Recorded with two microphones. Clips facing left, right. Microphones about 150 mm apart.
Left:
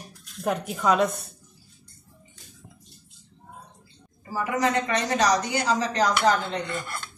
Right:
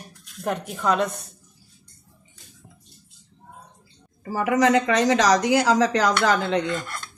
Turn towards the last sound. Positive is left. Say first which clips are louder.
# right 2 dB
turn(degrees=-90)